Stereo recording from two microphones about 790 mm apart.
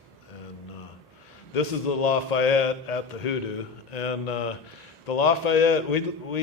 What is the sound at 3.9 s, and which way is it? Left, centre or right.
Mantra, left.